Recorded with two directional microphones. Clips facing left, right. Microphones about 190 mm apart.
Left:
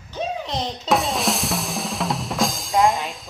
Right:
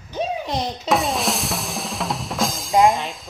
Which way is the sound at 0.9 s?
Centre (ahead or behind).